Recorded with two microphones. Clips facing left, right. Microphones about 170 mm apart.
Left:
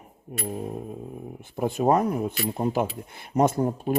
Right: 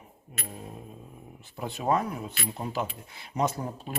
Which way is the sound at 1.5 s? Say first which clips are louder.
Left 6 dB; 50° left (ahead or behind).